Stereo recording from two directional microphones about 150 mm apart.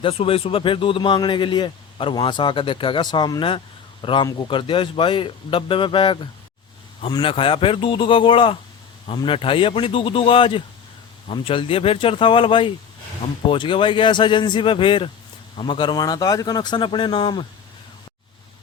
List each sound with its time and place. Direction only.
0.0 s a man's voice: 40° left (ahead or behind)